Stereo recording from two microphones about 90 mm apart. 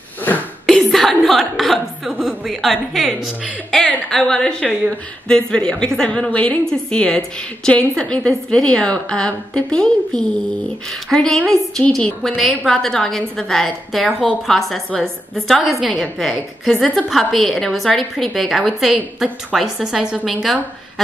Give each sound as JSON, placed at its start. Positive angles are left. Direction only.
{"t": 0.7, "sound": "a woman's voice", "side_deg": 5}